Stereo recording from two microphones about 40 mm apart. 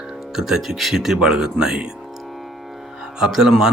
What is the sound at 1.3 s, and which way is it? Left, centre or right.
Speech, right.